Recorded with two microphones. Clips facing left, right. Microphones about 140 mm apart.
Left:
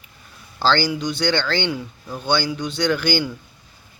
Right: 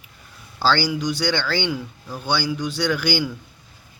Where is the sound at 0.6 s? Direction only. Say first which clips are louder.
Left 1 dB; 10° right (ahead or behind).